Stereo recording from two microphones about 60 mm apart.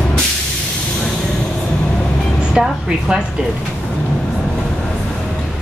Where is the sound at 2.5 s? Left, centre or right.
Centre.